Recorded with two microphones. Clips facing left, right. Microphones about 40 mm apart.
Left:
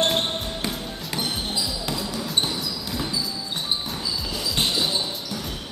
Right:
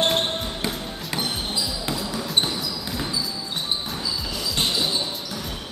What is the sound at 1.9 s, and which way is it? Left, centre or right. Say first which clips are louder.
Basketball bounce: right 1 dB; centre.